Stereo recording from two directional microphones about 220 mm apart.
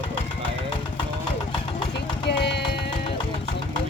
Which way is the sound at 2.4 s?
50° left (ahead or behind).